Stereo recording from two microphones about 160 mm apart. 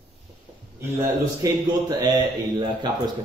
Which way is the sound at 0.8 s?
15° right (ahead or behind).